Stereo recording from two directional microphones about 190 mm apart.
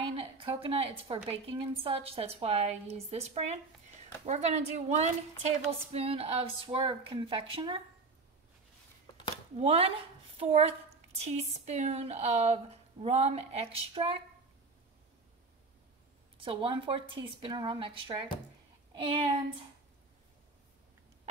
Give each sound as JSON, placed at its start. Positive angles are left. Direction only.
{"t": 0.1, "sound": "a woman's voice", "side_deg": -30}
{"t": 9.6, "sound": "a woman's voice", "side_deg": -30}
{"t": 16.4, "sound": "speech", "side_deg": -30}